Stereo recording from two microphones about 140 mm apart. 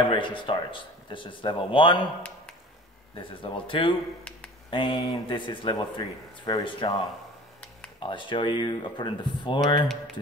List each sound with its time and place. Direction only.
0.1 s speech: 35° left (ahead or behind)
3.2 s speech: 35° left (ahead or behind)